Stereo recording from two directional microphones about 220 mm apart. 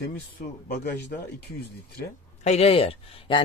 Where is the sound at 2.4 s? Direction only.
30° left (ahead or behind).